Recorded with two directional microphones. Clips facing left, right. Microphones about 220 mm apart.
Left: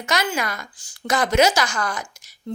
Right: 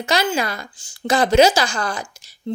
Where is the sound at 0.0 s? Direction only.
30° right (ahead or behind).